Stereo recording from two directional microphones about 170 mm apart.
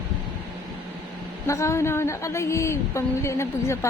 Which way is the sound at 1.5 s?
15° left (ahead or behind).